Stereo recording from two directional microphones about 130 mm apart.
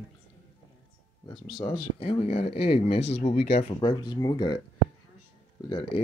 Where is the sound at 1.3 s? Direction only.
40° left (ahead or behind); by 3.8 s 55° left (ahead or behind).